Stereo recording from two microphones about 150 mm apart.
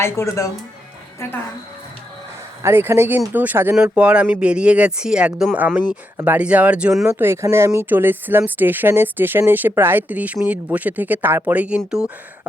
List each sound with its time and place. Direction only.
0.0 s speech: 20° left (ahead or behind)
2.6 s speech: 15° right (ahead or behind)